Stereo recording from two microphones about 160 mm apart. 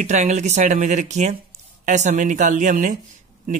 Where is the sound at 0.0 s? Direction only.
45° right (ahead or behind).